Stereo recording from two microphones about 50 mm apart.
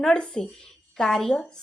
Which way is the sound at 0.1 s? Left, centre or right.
Centre.